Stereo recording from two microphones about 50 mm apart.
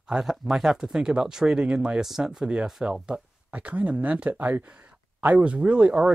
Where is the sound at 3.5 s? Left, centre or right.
Right.